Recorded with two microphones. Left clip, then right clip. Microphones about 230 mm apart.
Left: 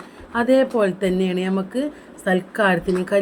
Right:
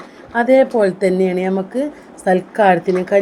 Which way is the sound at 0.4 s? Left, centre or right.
Centre.